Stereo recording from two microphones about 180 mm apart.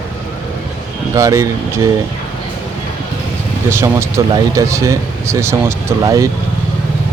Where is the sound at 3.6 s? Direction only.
15° right (ahead or behind).